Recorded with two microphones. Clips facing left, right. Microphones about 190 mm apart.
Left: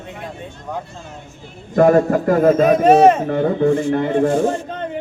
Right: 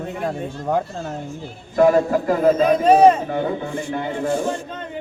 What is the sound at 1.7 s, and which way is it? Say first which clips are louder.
A man's voice: left 3 dB; 50° left (ahead or behind).